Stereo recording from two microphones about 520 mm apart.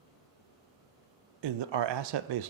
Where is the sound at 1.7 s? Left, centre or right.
Right.